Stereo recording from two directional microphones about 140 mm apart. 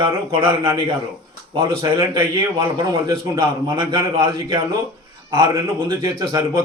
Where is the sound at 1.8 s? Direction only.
25° right (ahead or behind).